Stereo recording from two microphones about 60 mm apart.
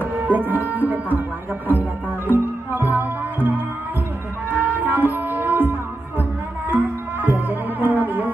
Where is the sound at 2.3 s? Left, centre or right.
Right.